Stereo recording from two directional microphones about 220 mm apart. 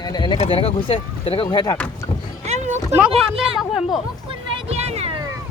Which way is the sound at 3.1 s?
25° right (ahead or behind).